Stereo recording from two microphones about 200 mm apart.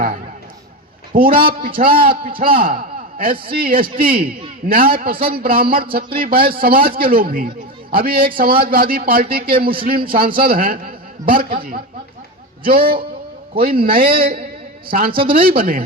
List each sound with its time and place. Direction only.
1.1 s a man's voice: 45° right (ahead or behind)